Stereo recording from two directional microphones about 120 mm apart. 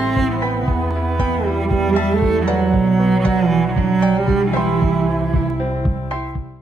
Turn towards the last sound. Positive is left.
turn(degrees=0)  # may be behind; listen again after turning